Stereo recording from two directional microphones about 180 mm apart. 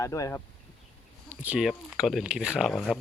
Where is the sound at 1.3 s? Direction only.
10° right (ahead or behind).